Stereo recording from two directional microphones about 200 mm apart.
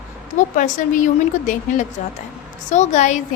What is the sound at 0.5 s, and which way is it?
A woman's voice, 40° left (ahead or behind).